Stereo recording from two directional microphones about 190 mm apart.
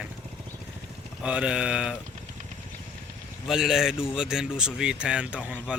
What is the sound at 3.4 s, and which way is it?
Speech, centre (ahead or behind).